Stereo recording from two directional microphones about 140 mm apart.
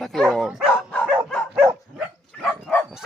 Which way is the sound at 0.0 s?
Centre (ahead or behind).